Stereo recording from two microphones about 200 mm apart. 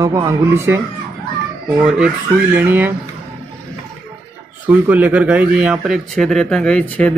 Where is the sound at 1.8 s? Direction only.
5° right (ahead or behind).